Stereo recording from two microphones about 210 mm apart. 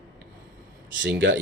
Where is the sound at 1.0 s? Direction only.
60° right (ahead or behind).